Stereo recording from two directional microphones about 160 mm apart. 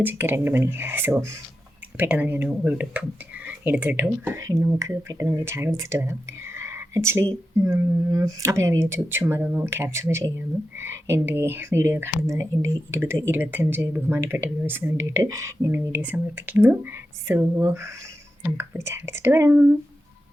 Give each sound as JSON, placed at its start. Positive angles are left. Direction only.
{"t": 0.0, "sound": "speech", "side_deg": -15}